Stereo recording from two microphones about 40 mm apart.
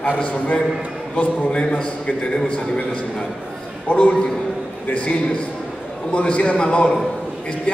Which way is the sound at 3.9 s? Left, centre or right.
Left.